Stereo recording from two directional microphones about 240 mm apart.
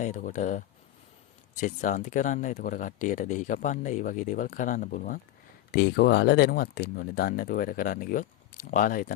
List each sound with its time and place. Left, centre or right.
0.0 s speech: left